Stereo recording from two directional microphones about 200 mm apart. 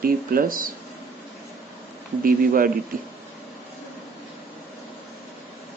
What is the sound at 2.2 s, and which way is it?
Speech, 45° right (ahead or behind).